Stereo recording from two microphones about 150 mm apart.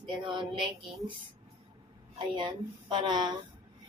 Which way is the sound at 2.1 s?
30° right (ahead or behind).